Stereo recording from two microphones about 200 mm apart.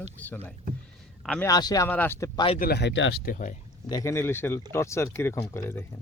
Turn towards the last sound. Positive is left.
turn(degrees=10)  # may be behind; listen again after turning